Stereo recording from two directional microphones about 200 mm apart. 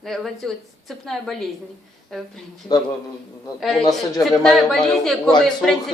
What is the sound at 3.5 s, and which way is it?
Speech, centre (ahead or behind).